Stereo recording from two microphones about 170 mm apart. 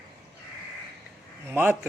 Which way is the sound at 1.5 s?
10° right (ahead or behind).